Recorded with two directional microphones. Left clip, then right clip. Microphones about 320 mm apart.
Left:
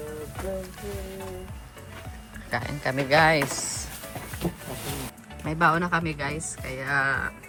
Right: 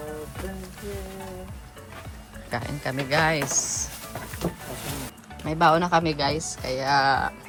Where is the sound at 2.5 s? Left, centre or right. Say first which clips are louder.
Left 2 dB; centre.